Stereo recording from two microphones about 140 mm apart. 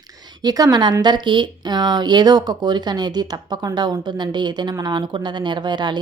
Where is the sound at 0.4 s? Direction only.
25° right (ahead or behind).